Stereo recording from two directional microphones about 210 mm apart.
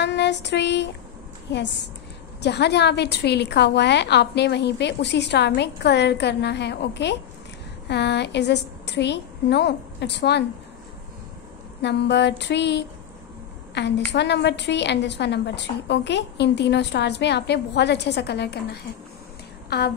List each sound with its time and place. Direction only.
0.0 s a sound: 55° left (ahead or behind)
2.4 s a woman's voice: 55° left (ahead or behind)
11.8 s a woman's voice: 55° left (ahead or behind)